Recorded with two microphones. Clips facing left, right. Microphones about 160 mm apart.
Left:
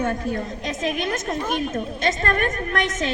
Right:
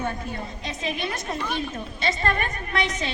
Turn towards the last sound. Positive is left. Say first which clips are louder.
# left 3 dB
turn(degrees=50)  # may be behind; listen again after turning